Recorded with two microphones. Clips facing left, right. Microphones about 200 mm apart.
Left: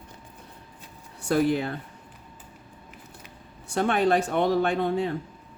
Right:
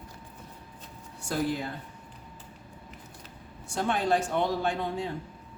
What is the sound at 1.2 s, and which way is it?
Speech, 65° left (ahead or behind).